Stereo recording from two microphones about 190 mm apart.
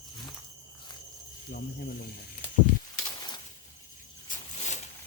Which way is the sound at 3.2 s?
20° left (ahead or behind).